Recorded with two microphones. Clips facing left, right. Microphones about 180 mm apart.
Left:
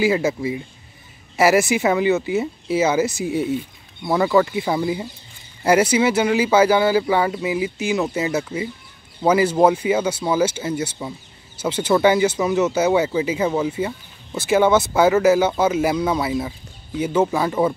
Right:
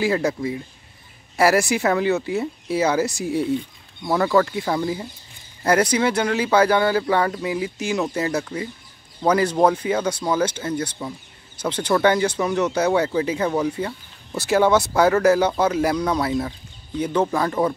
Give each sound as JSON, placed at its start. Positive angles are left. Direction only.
{"t": 0.0, "sound": "speech", "side_deg": 0}